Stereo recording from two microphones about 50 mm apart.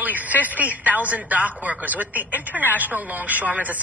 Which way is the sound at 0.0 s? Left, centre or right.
Right.